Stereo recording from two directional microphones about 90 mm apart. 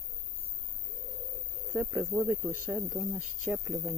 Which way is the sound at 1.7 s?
25° right (ahead or behind).